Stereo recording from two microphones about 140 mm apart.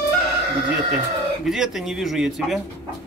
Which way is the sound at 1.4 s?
5° right (ahead or behind).